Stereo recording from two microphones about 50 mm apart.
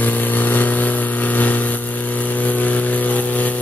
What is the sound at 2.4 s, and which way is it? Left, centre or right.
Vehicle, left.